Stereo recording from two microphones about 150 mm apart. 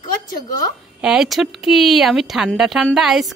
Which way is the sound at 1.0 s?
5° right (ahead or behind).